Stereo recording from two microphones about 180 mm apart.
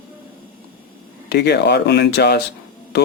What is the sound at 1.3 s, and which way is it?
Speech, 70° left (ahead or behind).